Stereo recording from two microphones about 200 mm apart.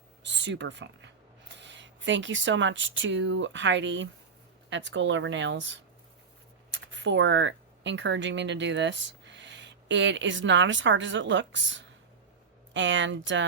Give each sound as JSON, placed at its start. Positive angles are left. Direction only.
{"t": 0.2, "sound": "speech", "side_deg": -60}